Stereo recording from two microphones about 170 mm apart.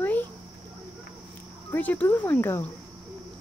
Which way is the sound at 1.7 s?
10° left (ahead or behind).